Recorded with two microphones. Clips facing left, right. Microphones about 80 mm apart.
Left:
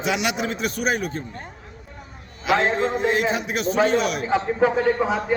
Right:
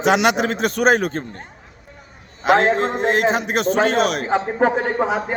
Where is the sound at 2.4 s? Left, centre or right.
Right.